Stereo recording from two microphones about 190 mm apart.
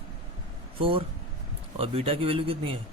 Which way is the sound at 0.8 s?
30° right (ahead or behind).